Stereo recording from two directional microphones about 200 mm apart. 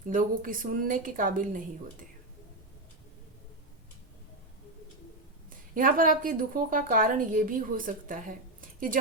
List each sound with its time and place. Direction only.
0.1 s a woman's voice: 45° right (ahead or behind)
5.5 s a woman's voice: 40° right (ahead or behind)